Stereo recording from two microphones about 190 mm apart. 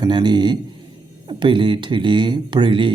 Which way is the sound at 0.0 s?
25° right (ahead or behind).